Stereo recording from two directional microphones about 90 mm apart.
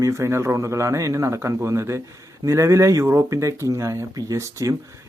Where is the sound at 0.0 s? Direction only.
30° right (ahead or behind).